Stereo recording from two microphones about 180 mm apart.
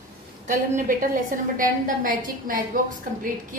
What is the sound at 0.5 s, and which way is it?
A woman's voice, 45° right (ahead or behind).